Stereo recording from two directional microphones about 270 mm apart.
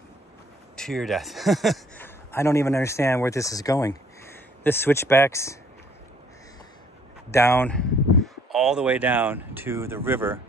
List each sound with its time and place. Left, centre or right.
0.7 s a man's voice: centre
7.2 s speech: centre